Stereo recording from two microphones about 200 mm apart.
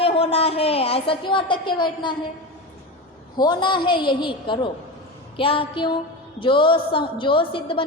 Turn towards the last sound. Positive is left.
turn(degrees=25)  # may be behind; listen again after turning